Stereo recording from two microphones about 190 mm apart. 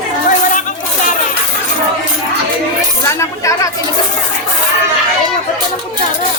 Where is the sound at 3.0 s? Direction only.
15° left (ahead or behind).